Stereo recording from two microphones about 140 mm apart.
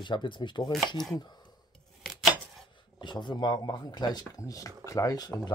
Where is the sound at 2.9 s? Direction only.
35° left (ahead or behind).